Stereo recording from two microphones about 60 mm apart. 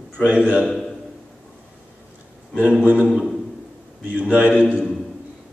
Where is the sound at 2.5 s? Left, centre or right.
Centre.